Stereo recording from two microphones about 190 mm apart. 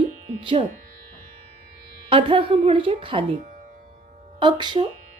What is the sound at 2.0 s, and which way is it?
Speech, 25° right (ahead or behind).